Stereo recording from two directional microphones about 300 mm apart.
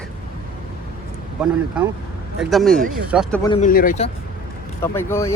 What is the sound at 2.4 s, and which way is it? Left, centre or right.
Speech, centre.